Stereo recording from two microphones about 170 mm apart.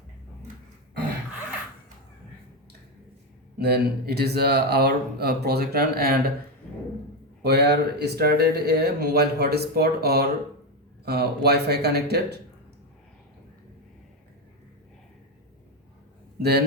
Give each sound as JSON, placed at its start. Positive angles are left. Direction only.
{"t": 3.6, "sound": "speech", "side_deg": -70}
{"t": 7.4, "sound": "speech", "side_deg": -75}
{"t": 16.4, "sound": "speech", "side_deg": -70}